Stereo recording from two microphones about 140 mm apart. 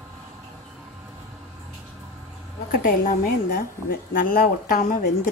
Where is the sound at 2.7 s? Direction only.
90° left; by 5.0 s 75° left (ahead or behind).